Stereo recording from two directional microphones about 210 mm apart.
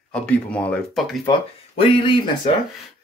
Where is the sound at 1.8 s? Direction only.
25° left (ahead or behind).